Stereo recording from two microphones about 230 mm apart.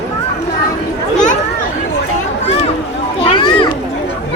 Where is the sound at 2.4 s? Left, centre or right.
Left.